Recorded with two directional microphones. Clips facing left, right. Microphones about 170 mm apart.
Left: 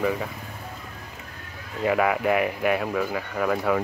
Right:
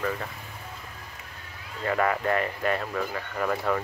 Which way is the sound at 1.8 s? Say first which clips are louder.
Left 4 dB; 10° left (ahead or behind).